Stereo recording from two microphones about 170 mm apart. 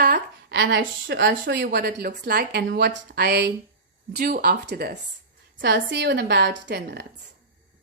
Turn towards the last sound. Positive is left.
turn(degrees=-85)